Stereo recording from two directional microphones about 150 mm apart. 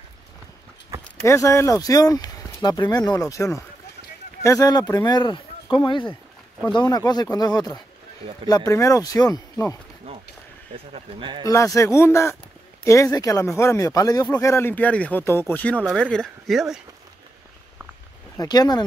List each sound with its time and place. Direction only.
1.2 s speech: 20° left (ahead or behind)
10.9 s a man's voice: 35° right (ahead or behind)
11.4 s speech: 20° left (ahead or behind); by 16.8 s centre (ahead or behind)
18.4 s speech: 25° left (ahead or behind)